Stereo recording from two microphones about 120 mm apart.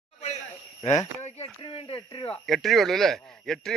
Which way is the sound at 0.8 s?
65° left (ahead or behind).